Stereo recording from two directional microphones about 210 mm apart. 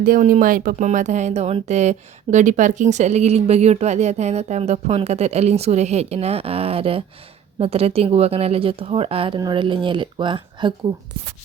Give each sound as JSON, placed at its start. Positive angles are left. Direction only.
{"t": 0.0, "sound": "a woman's voice", "side_deg": -40}